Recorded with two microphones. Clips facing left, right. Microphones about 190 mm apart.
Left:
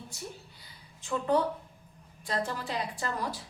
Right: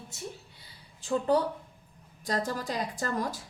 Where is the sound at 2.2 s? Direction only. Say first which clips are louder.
Right 2 dB; 40° right (ahead or behind).